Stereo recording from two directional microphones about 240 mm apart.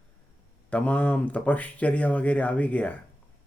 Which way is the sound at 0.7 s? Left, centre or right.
Centre.